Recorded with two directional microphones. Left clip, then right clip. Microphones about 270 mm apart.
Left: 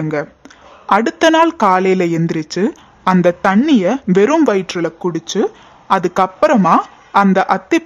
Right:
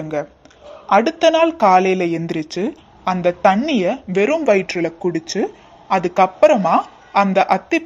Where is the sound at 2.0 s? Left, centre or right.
Left.